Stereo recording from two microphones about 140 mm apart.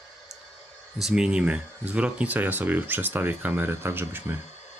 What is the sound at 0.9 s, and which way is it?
Speech, 5° right (ahead or behind).